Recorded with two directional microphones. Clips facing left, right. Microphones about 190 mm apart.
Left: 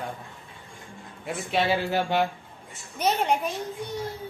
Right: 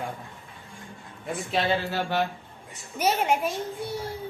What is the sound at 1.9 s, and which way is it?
Speech, 15° left (ahead or behind).